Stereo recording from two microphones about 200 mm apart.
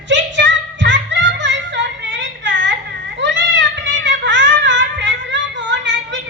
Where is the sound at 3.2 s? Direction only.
65° right (ahead or behind).